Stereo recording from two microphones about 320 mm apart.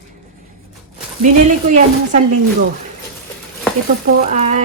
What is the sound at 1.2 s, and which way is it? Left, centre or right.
Speech, right.